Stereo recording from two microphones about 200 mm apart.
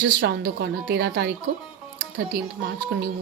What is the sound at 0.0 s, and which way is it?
A woman's voice, 55° right (ahead or behind).